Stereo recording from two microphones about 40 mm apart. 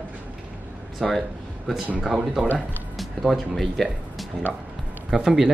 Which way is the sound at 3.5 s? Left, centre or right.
Centre.